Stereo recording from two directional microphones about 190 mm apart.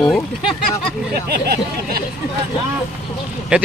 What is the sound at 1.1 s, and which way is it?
Speech, 55° right (ahead or behind).